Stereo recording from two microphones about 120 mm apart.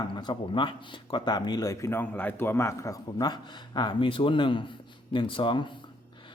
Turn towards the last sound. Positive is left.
turn(degrees=45)  # may be behind; listen again after turning